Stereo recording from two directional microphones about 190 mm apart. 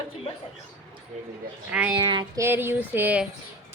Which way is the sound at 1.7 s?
5° right (ahead or behind).